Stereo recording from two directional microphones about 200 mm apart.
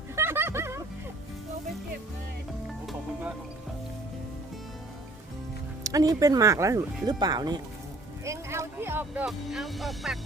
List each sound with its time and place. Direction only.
0.2 s music: 10° right (ahead or behind)
5.8 s speech: 20° right (ahead or behind); by 10.2 s centre (ahead or behind)